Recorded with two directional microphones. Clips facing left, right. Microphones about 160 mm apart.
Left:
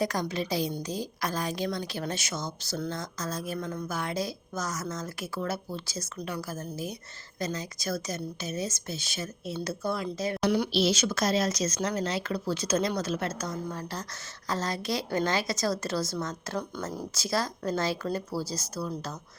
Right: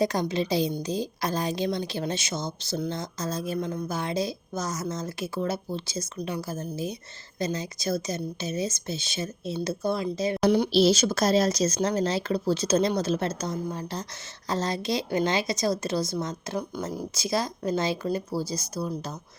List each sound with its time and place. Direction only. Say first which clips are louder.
0.0 s a woman's voice: right 4 dB; 25° right (ahead or behind)
10.7 s a woman's voice: right 5 dB; 35° right (ahead or behind); by 19.1 s 15° right (ahead or behind)